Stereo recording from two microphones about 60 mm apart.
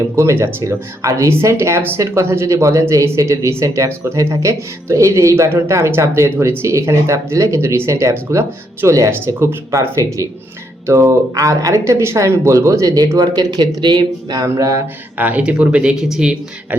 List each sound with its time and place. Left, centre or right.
0.0 s speech: right
1.0 s speech: right
1.3 s speech: right
9.2 s speech: right
9.9 s speech: right
10.8 s speech: right
13.1 s speech: right
14.6 s speech: right
15.2 s speech: right